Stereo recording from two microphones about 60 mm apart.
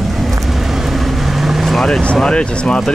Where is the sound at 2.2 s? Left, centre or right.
Centre.